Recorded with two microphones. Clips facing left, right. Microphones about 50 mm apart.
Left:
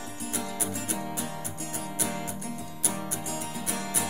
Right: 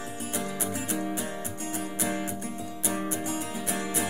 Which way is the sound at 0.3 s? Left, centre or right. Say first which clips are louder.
Right 1 dB; right.